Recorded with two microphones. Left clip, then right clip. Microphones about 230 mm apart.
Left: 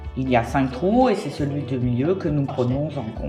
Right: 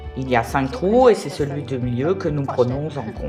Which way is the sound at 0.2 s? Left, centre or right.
Centre.